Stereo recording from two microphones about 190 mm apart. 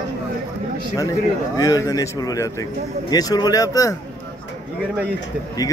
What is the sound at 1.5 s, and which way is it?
A man's voice, 20° left (ahead or behind).